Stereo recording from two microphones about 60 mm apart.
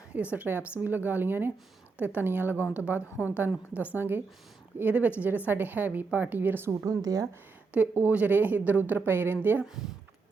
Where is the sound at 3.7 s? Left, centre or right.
Left.